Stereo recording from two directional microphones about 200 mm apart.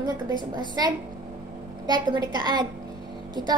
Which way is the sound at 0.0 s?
20° right (ahead or behind).